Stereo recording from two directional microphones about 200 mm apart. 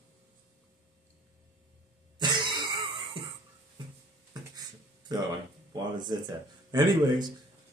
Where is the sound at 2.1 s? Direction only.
20° right (ahead or behind).